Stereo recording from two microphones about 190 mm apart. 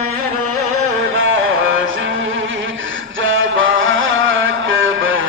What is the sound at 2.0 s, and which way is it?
Music, 85° right.